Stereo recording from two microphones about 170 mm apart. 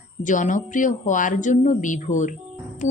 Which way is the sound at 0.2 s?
50° left (ahead or behind).